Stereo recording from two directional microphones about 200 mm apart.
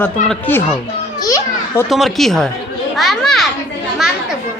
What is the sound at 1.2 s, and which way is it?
Children playing, 15° left (ahead or behind).